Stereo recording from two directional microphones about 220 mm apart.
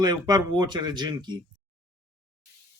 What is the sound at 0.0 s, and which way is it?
Speech, 20° right (ahead or behind).